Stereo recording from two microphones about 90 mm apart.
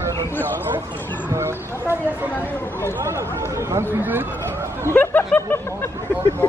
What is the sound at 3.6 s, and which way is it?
Speech, 30° right (ahead or behind).